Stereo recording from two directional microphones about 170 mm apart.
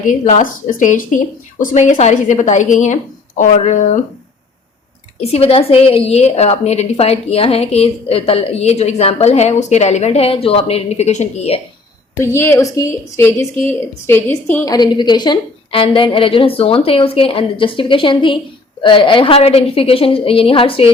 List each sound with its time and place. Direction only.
0.0 s speech: 50° left (ahead or behind)
5.2 s a woman's voice: 35° left (ahead or behind)
12.1 s a woman's voice: 15° left (ahead or behind); by 20.9 s 35° left (ahead or behind)